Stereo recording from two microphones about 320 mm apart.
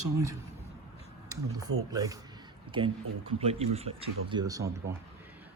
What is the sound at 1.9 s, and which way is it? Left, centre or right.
Speech, centre.